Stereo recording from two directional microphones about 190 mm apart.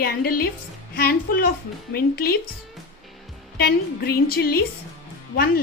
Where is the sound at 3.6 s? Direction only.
55° left (ahead or behind).